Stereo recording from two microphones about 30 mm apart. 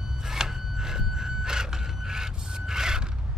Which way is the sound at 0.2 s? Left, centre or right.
Centre.